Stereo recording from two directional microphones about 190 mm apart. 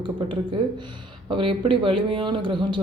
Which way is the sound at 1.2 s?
25° right (ahead or behind).